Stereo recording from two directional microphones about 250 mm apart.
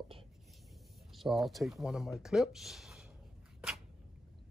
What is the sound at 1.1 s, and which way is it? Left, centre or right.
Speech, centre.